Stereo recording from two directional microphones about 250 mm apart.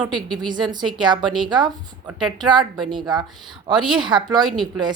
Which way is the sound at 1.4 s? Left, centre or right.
Centre.